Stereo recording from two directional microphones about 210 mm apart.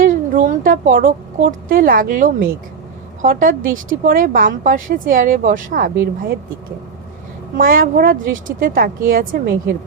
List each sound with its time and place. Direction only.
0.0 s a woman's voice: 40° right (ahead or behind)
7.5 s a woman's voice: 40° right (ahead or behind)